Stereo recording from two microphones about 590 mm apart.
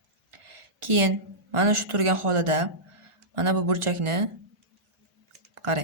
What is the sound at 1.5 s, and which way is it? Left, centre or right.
Speech, right.